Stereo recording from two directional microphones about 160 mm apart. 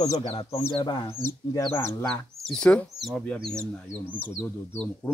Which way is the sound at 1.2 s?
15° left (ahead or behind).